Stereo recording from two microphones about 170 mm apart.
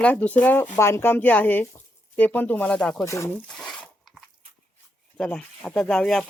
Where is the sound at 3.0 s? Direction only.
15° left (ahead or behind).